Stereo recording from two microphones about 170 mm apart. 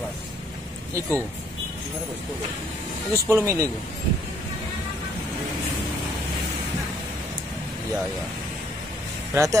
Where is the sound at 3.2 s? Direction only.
15° right (ahead or behind).